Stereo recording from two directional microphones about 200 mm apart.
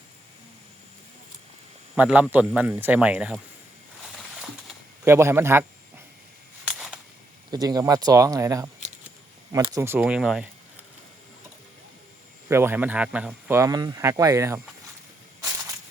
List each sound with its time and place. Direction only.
2.0 s speech: 5° right (ahead or behind)
5.0 s speech: 10° right (ahead or behind)
6.7 s a sound: 5° right (ahead or behind)
7.5 s speech: 20° right (ahead or behind)
9.8 s speech: 10° right (ahead or behind)
12.5 s speech: 10° right (ahead or behind)